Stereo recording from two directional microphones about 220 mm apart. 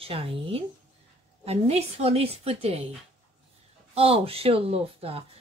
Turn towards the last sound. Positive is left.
turn(degrees=-25)  # may be behind; listen again after turning